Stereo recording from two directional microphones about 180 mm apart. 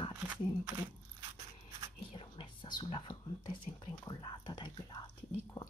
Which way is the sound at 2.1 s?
25° left (ahead or behind).